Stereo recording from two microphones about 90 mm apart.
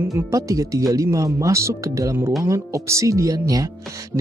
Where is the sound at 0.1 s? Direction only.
40° right (ahead or behind).